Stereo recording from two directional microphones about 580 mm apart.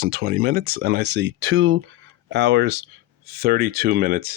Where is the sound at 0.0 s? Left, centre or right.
Centre.